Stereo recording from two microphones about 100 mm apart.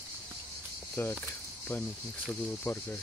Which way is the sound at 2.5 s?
20° left (ahead or behind).